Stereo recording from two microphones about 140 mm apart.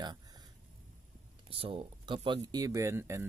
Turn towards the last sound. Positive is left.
turn(degrees=-20)  # may be behind; listen again after turning